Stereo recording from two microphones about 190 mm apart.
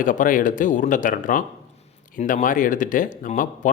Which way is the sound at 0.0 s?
45° left (ahead or behind).